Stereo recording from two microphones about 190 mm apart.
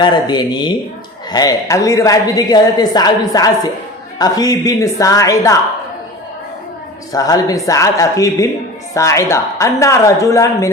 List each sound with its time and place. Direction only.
0.0 s a woman's voice: 25° left (ahead or behind)
7.1 s a woman's voice: 20° left (ahead or behind)